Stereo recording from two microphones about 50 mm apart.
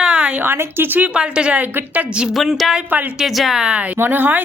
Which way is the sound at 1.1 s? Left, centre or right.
Centre.